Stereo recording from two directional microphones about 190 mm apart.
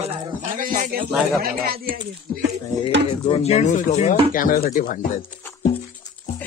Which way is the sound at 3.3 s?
35° left (ahead or behind).